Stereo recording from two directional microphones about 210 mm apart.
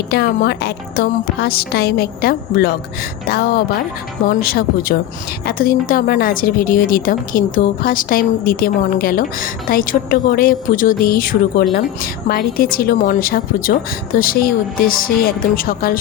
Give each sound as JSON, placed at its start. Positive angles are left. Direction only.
{"t": 0.1, "sound": "a woman's voice", "side_deg": 50}